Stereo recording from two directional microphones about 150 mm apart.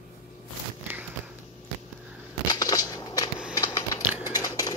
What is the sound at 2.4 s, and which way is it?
Scissors, 25° left (ahead or behind).